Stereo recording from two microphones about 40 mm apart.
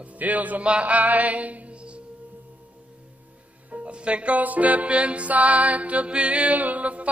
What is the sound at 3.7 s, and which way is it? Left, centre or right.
Speech, right.